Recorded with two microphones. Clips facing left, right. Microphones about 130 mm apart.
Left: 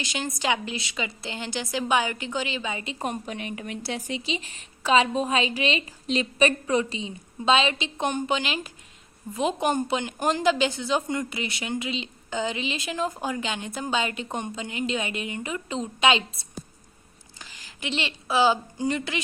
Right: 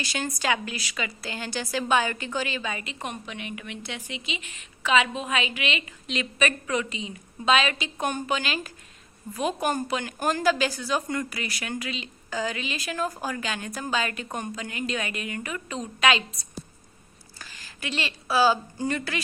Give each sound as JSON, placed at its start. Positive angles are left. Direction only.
{"t": 0.0, "sound": "a woman's voice", "side_deg": 15}
{"t": 3.0, "sound": "a woman's voice", "side_deg": 35}
{"t": 17.4, "sound": "a woman's voice", "side_deg": 15}